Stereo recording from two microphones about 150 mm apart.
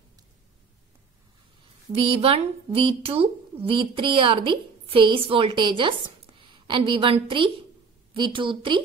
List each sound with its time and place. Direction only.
1.9 s speech: 40° right (ahead or behind)